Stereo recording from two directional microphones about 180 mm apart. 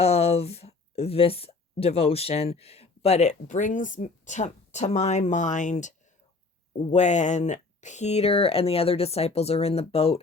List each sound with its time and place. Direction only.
0.0 s speech: 35° left (ahead or behind)
6.9 s speech: 40° left (ahead or behind)